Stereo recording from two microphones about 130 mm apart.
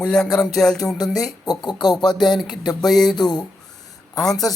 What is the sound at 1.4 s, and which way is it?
Speech, 30° left (ahead or behind).